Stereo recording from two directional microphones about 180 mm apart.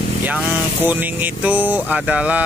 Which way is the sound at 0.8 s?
10° right (ahead or behind).